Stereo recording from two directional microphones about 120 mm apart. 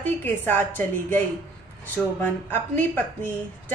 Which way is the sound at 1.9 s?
15° left (ahead or behind).